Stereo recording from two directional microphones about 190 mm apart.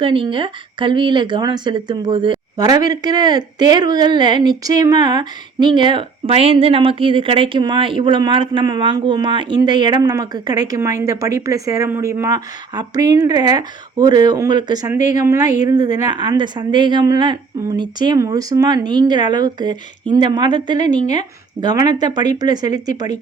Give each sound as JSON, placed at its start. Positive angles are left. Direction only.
{"t": 0.0, "sound": "speech", "side_deg": -25}